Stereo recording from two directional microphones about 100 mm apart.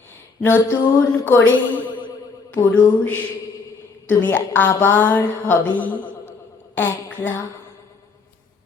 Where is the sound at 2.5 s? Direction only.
20° left (ahead or behind).